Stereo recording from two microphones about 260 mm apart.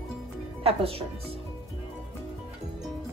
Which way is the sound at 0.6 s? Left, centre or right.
Right.